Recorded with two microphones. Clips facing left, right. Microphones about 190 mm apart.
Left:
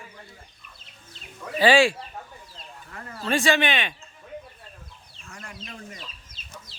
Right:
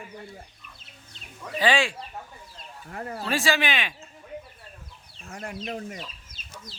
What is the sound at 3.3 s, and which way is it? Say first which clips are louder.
Speech: left 3 dB; centre (ahead or behind).